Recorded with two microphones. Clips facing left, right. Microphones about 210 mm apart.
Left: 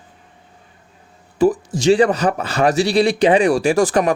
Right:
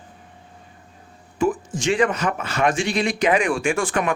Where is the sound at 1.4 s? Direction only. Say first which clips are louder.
Left 6 dB; 35° left (ahead or behind).